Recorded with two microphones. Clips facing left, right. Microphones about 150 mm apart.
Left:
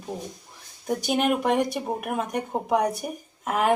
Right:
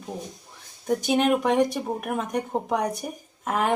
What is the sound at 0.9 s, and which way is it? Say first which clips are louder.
Speech: right 2 dB; centre (ahead or behind).